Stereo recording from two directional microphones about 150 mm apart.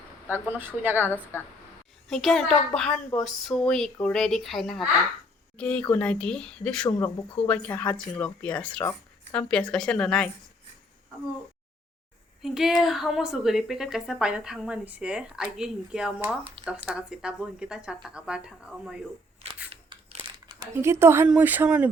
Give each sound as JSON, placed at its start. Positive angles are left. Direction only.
{"t": 0.3, "sound": "speech", "side_deg": -10}
{"t": 1.1, "sound": "a woman's voice", "side_deg": 15}
{"t": 2.0, "sound": "a woman's voice", "side_deg": 5}
{"t": 12.4, "sound": "a woman's voice", "side_deg": 0}
{"t": 19.7, "sound": "scissors", "side_deg": -40}
{"t": 20.7, "sound": "speech", "side_deg": -15}